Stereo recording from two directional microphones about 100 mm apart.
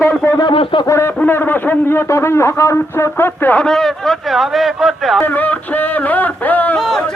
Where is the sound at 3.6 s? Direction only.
5° left (ahead or behind).